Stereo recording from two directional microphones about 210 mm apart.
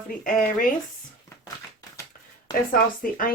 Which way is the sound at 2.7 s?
40° left (ahead or behind).